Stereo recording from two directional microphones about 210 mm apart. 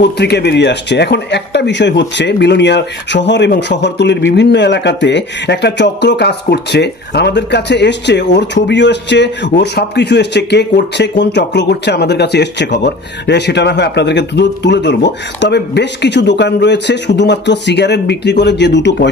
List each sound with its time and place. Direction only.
0.0 s speech: 50° left (ahead or behind)